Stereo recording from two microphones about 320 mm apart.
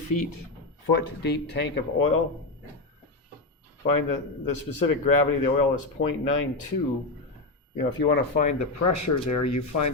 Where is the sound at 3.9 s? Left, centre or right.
Left.